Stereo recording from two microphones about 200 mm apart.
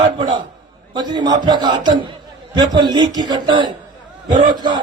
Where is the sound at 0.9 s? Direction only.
20° right (ahead or behind).